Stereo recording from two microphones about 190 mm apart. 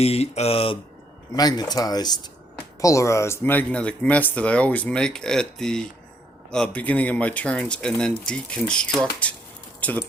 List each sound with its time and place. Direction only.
0.0 s speech: 35° left (ahead or behind); by 9.3 s 5° left (ahead or behind)